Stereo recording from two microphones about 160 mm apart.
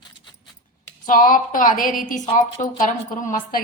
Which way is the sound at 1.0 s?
60° left (ahead or behind).